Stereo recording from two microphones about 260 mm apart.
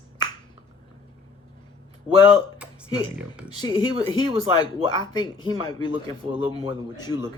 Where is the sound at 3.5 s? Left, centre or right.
Centre.